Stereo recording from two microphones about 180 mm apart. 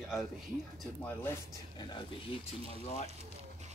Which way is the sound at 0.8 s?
10° left (ahead or behind).